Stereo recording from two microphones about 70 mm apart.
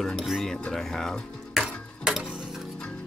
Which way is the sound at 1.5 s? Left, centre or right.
Centre.